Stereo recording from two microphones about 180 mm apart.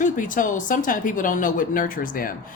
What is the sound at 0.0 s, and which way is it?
Speech, 45° left (ahead or behind).